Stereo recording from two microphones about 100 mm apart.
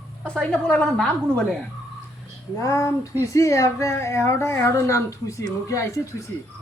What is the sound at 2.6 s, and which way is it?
Speech, 30° left (ahead or behind).